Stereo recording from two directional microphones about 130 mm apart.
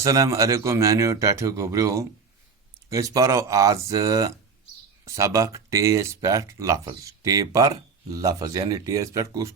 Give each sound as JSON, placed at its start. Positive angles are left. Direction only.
{"t": 0.0, "sound": "speech", "side_deg": -25}